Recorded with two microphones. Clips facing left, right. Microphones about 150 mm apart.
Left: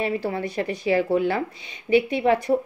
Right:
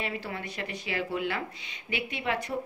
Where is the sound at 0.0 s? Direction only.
35° left (ahead or behind).